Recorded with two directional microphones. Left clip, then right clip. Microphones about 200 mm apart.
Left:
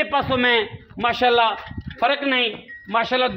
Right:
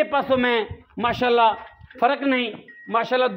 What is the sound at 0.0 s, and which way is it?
Speech, 45° right (ahead or behind).